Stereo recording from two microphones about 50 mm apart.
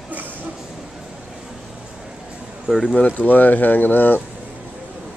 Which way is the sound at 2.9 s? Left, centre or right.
Left.